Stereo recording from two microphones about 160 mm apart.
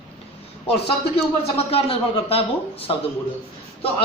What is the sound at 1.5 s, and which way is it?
Speech, 35° left (ahead or behind).